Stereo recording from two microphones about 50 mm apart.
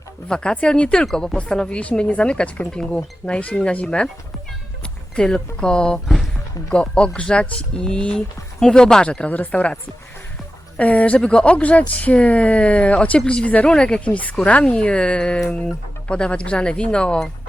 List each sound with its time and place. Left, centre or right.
0.3 s speech: centre
1.8 s speech: left
5.1 s speech: centre
10.8 s speech: left